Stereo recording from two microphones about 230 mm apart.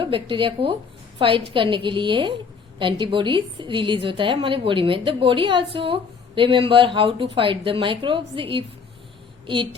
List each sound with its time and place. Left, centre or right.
0.0 s a woman's voice: right